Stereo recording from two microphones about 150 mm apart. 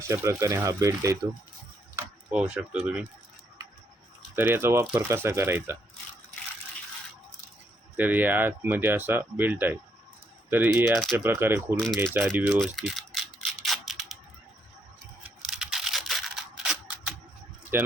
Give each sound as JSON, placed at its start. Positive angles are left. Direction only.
{"t": 0.0, "sound": "speech", "side_deg": -20}
{"t": 2.3, "sound": "speech", "side_deg": -10}
{"t": 4.4, "sound": "speech", "side_deg": -15}
{"t": 7.9, "sound": "speech", "side_deg": -10}
{"t": 12.5, "sound": "a sound", "side_deg": 0}
{"t": 15.4, "sound": "camera", "side_deg": -5}
{"t": 17.7, "sound": "speech", "side_deg": -15}